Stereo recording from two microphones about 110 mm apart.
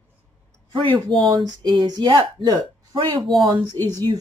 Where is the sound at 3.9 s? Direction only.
35° right (ahead or behind).